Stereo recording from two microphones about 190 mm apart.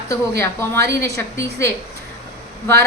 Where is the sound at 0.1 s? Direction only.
15° left (ahead or behind).